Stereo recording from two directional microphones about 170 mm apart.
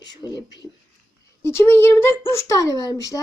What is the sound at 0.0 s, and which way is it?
Speech, 25° left (ahead or behind).